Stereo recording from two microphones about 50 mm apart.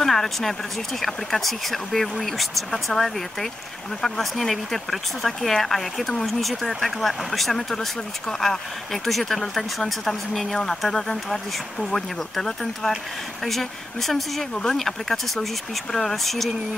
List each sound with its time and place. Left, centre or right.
0.0 s speech: centre
14.5 s speech: centre
14.8 s speech: centre